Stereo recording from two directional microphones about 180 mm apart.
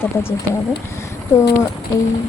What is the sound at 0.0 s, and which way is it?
Speech, 15° left (ahead or behind).